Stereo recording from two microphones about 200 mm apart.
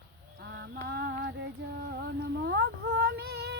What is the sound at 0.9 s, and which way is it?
Female singing, 55° right (ahead or behind).